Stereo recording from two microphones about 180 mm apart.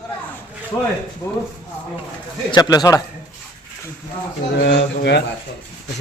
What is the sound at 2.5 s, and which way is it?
Speech, 20° left (ahead or behind).